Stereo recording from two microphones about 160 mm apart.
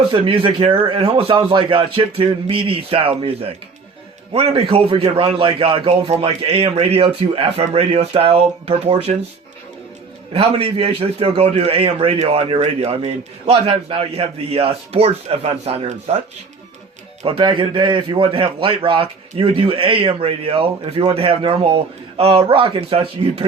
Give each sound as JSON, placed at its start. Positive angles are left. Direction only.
{"t": 0.1, "sound": "a man's voice", "side_deg": -35}
{"t": 10.3, "sound": "a man's voice", "side_deg": -35}
{"t": 17.2, "sound": "a man's voice", "side_deg": -30}